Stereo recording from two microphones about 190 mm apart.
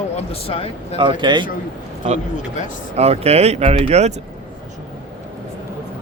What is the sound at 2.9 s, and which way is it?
Speech, 35° right (ahead or behind).